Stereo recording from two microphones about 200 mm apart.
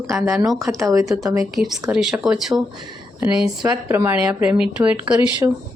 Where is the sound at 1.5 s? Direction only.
Centre (ahead or behind).